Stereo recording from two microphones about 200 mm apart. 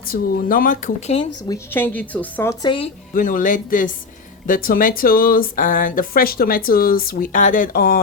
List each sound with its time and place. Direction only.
0.1 s speech: 45° left (ahead or behind)
1.5 s speech: 10° left (ahead or behind)
3.2 s speech: 40° left (ahead or behind)